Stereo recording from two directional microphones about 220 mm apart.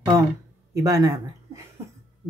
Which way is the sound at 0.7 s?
15° right (ahead or behind).